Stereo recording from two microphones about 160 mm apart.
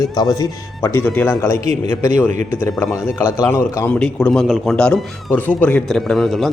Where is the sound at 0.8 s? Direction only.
15° left (ahead or behind).